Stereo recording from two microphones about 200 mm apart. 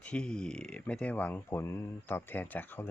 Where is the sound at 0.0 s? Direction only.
5° left (ahead or behind).